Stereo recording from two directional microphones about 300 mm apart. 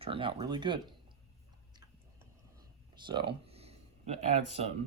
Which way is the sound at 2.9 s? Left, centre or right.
Centre.